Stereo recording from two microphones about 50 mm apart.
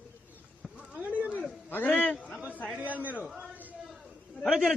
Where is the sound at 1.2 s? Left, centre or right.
Right.